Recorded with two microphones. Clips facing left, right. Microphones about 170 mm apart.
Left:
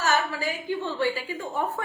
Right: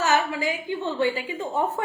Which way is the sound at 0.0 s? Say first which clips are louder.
Right 3 dB; 15° right (ahead or behind).